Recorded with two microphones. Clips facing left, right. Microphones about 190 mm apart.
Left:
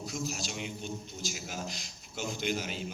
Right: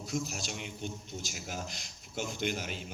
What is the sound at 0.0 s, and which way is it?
A man's voice, 55° right (ahead or behind).